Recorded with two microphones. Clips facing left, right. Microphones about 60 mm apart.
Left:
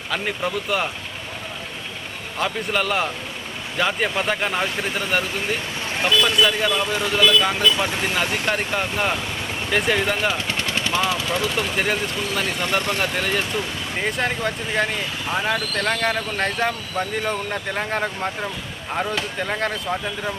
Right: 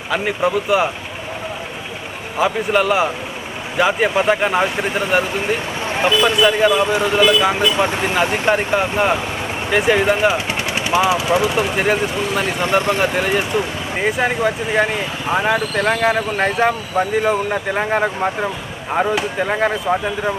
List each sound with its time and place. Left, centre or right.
0.1 s speech: centre
2.4 s speech: centre